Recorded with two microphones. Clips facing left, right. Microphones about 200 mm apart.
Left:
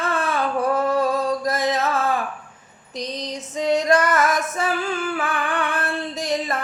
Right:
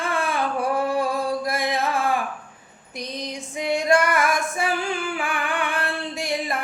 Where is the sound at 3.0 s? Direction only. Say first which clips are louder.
Left 2 dB; 10° right (ahead or behind).